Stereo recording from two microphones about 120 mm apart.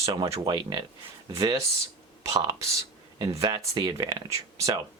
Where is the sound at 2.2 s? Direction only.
30° right (ahead or behind).